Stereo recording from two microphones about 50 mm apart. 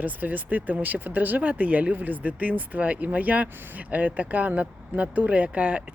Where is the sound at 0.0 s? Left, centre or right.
Right.